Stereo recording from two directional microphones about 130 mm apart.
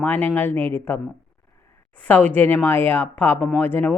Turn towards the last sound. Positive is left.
turn(degrees=15)  # may be behind; listen again after turning